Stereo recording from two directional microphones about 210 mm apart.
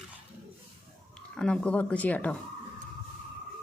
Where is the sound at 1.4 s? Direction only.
5° left (ahead or behind).